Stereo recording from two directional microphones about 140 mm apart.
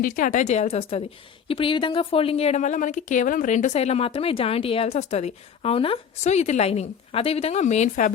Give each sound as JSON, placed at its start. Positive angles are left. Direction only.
{"t": 0.0, "sound": "a woman's voice", "side_deg": 70}